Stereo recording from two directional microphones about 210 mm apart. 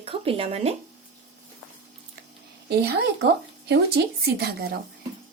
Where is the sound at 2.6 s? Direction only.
50° right (ahead or behind).